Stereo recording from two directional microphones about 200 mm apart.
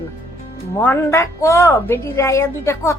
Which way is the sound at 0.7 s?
10° left (ahead or behind).